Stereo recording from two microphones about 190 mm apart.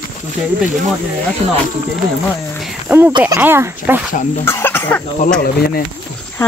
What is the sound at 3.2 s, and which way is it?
Speech, 10° right (ahead or behind).